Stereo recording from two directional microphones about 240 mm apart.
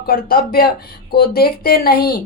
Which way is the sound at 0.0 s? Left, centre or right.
Left.